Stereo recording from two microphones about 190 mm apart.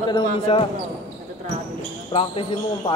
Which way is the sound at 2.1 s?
30° left (ahead or behind).